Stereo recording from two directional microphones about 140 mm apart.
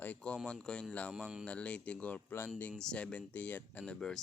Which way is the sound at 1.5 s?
10° left (ahead or behind).